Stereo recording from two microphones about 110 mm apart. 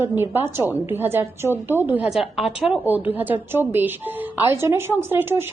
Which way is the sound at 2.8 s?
15° right (ahead or behind).